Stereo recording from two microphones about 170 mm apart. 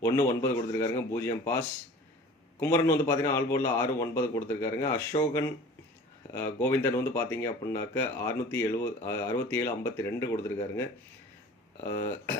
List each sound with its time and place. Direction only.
0.0 s a man's voice: 15° left (ahead or behind)
11.8 s a man's voice: 20° left (ahead or behind)